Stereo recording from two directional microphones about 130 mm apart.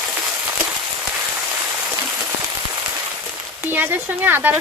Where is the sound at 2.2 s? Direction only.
30° right (ahead or behind).